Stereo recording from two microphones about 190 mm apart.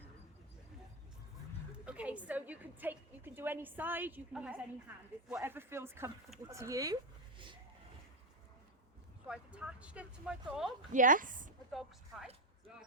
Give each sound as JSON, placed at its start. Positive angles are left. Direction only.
{"t": 1.8, "sound": "a woman's voice", "side_deg": -5}
{"t": 9.2, "sound": "speech", "side_deg": -5}
{"t": 10.9, "sound": "a woman's voice", "side_deg": -45}
{"t": 11.7, "sound": "speech", "side_deg": 0}